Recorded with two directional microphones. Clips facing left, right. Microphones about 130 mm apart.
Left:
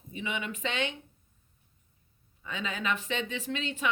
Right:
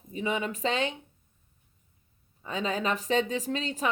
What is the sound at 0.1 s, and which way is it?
Speech, 35° right (ahead or behind).